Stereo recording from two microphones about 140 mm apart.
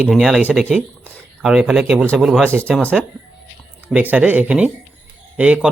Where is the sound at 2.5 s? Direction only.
15° right (ahead or behind).